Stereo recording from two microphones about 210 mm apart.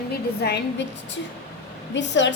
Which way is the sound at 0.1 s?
50° left (ahead or behind).